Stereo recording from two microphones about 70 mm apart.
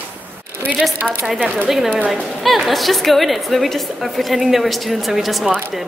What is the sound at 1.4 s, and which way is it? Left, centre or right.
Speech, right.